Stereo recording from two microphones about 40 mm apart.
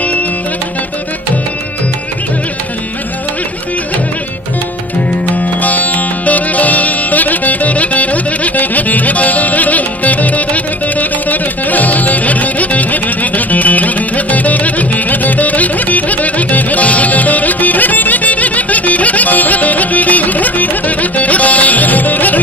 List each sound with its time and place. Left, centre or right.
5.6 s music: left